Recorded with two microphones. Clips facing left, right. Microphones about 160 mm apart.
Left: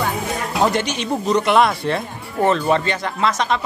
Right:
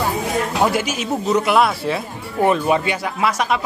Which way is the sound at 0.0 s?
5° right (ahead or behind).